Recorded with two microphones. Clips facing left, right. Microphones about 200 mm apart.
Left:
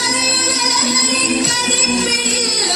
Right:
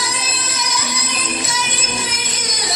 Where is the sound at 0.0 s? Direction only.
70° left (ahead or behind).